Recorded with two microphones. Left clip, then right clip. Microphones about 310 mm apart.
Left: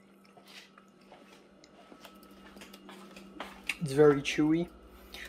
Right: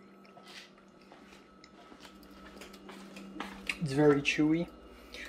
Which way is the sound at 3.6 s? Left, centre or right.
Centre.